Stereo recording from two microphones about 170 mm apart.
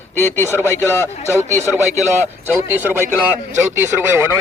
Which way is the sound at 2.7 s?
10° right (ahead or behind).